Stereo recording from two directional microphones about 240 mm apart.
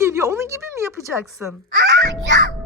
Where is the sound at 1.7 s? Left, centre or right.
Right.